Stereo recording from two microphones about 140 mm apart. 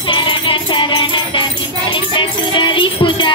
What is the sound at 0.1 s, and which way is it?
Music, 35° left (ahead or behind).